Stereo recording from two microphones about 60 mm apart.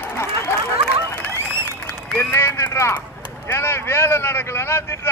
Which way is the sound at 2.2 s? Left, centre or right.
Left.